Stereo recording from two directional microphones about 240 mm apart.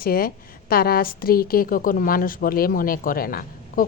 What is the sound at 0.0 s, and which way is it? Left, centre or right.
A woman's voice, left.